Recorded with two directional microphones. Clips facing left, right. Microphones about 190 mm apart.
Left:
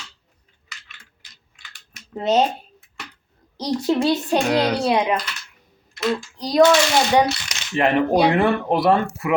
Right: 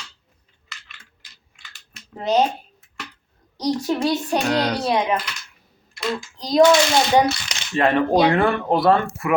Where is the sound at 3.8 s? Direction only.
25° left (ahead or behind).